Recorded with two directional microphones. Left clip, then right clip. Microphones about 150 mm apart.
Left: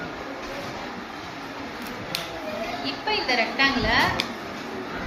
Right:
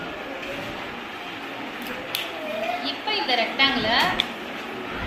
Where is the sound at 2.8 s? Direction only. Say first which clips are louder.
Even; 25° left (ahead or behind).